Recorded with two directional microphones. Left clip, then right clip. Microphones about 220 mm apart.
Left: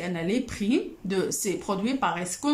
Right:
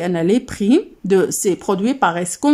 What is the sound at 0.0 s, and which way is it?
Speech, 35° right (ahead or behind).